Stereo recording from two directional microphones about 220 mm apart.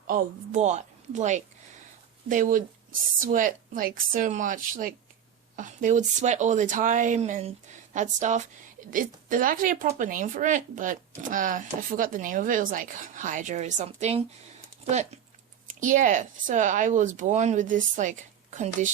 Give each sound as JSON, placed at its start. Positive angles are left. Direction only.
{"t": 0.1, "sound": "speech", "side_deg": -35}